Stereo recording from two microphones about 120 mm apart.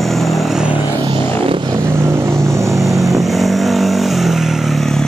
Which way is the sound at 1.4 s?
50° right (ahead or behind).